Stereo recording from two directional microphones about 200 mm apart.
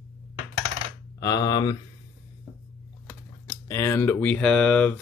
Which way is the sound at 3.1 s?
15° left (ahead or behind).